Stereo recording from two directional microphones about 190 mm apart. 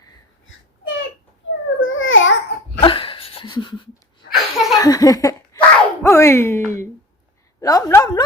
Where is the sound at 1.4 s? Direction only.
90° left.